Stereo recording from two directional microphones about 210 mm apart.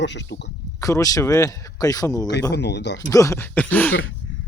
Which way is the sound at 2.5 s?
55° left (ahead or behind).